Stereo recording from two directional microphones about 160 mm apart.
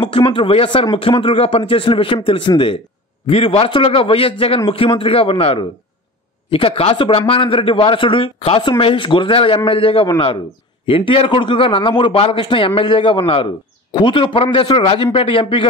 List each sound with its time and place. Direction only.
0.0 s a man's voice: 30° left (ahead or behind)